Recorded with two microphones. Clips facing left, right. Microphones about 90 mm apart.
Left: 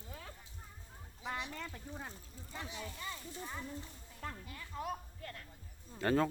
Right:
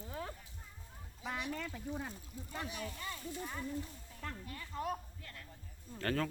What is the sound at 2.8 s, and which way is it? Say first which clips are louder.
Speech: right 2 dB; 5° left (ahead or behind).